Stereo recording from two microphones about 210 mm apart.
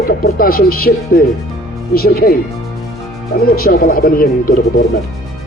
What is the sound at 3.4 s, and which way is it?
Speech, 45° left (ahead or behind).